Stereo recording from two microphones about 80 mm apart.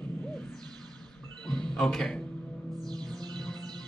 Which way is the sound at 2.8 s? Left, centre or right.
Right.